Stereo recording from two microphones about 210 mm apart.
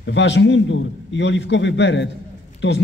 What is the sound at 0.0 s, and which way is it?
A man's voice, 60° left (ahead or behind).